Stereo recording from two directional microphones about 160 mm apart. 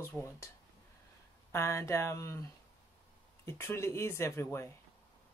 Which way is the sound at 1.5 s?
15° left (ahead or behind).